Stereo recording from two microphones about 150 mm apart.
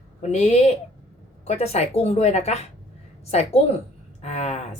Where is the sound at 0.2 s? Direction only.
50° left (ahead or behind).